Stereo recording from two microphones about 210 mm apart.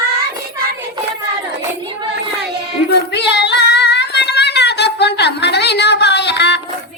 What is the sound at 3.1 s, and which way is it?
Female singing, 55° left (ahead or behind).